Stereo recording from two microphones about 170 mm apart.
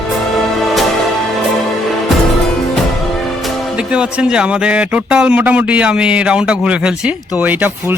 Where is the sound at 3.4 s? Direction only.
5° right (ahead or behind).